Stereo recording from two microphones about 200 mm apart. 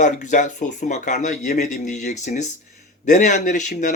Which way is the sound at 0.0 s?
40° left (ahead or behind).